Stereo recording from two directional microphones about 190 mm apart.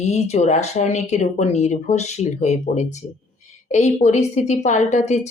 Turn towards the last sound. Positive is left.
turn(degrees=35)  # may be behind; listen again after turning